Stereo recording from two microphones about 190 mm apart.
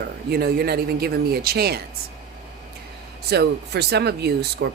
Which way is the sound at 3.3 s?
60° right (ahead or behind).